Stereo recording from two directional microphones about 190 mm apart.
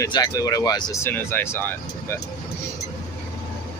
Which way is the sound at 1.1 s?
10° left (ahead or behind).